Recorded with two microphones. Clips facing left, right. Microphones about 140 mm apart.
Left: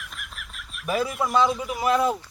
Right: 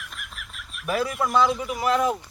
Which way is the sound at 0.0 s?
Centre (ahead or behind).